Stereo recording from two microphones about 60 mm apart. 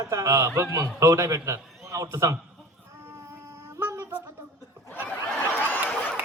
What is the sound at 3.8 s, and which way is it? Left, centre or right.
Music, right.